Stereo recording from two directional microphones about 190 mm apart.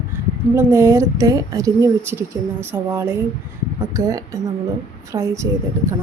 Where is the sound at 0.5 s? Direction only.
15° right (ahead or behind).